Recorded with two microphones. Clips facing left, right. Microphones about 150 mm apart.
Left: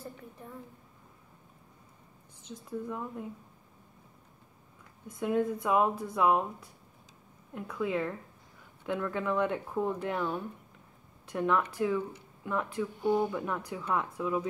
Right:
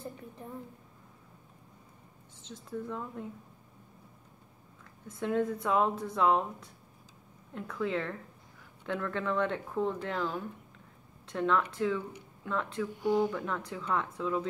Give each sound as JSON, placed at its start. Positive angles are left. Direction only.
{"t": 2.5, "sound": "a woman's voice", "side_deg": 5}
{"t": 5.2, "sound": "a woman's voice", "side_deg": 5}
{"t": 10.1, "sound": "speech", "side_deg": 25}
{"t": 11.3, "sound": "a woman's voice", "side_deg": 10}
{"t": 13.0, "sound": "speech", "side_deg": 20}
{"t": 13.7, "sound": "a woman's voice", "side_deg": 10}